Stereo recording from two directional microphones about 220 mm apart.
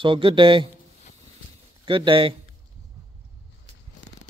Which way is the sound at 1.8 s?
25° right (ahead or behind).